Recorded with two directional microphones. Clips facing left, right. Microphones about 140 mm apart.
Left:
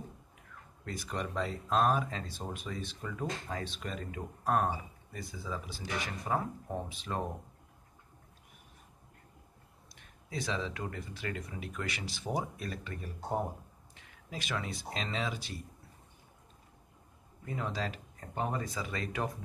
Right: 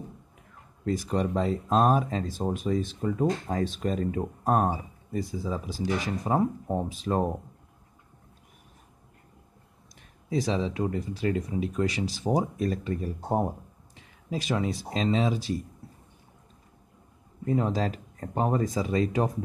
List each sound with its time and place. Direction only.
0.8 s speech: 35° right (ahead or behind)
10.3 s speech: 35° right (ahead or behind)
17.5 s speech: 40° right (ahead or behind)